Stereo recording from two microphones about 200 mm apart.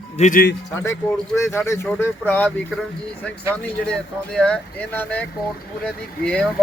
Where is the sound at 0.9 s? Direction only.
5° left (ahead or behind).